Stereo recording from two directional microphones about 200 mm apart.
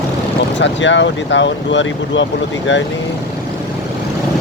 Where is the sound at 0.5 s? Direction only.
65° left (ahead or behind).